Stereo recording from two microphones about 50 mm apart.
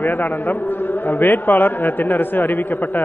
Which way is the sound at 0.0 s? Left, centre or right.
Left.